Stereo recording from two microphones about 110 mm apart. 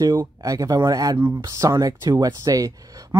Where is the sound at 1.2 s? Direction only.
25° right (ahead or behind).